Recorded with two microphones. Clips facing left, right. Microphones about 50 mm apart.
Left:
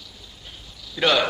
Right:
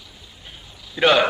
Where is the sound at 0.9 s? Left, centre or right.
Right.